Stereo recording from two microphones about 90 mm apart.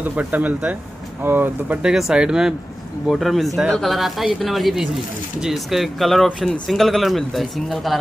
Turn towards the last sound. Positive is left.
turn(degrees=0)  # may be behind; listen again after turning